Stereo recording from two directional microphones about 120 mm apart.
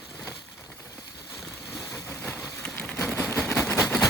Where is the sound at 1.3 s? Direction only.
5° left (ahead or behind).